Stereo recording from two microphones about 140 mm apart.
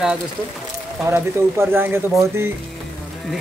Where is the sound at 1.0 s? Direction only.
15° right (ahead or behind).